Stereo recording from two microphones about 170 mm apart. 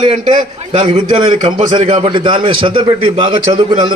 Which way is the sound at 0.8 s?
30° right (ahead or behind).